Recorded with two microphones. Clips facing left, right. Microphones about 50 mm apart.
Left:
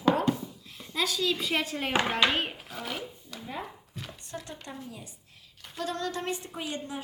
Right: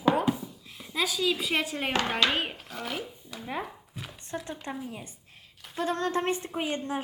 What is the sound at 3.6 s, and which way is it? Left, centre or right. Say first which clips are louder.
Chopping: right 1 dB; centre.